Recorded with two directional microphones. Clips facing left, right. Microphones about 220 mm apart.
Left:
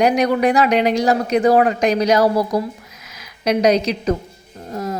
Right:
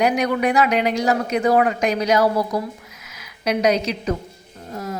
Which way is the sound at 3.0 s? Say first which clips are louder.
Left 3 dB; 40° left (ahead or behind).